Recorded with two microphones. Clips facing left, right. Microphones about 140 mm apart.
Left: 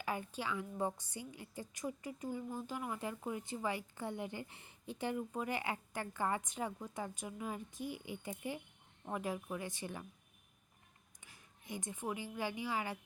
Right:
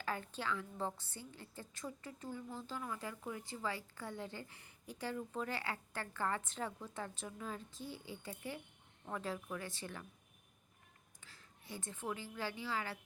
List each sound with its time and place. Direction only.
0.0 s a woman's voice: 15° left (ahead or behind)
11.2 s a woman's voice: 15° left (ahead or behind)